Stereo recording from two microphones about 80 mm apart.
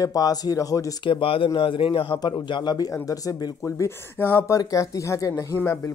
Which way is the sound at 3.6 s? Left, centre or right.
Left.